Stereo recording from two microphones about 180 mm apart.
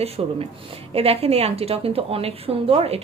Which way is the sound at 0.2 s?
30° right (ahead or behind).